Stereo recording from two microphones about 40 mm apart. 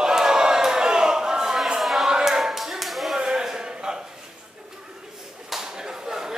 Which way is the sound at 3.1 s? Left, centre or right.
Centre.